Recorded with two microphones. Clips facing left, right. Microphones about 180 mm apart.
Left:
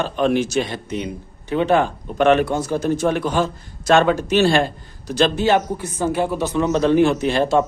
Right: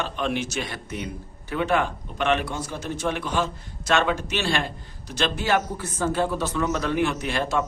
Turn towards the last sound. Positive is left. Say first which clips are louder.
# left 8 dB
turn(degrees=30)  # may be behind; listen again after turning